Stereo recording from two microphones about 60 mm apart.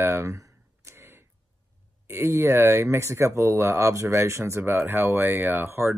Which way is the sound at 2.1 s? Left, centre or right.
Right.